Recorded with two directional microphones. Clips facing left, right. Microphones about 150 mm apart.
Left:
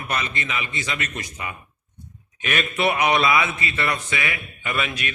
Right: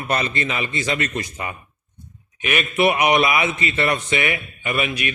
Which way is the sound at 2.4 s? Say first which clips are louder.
Right 4 dB; 10° right (ahead or behind).